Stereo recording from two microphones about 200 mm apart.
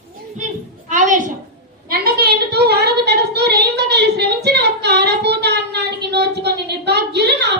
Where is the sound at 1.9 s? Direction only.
50° right (ahead or behind).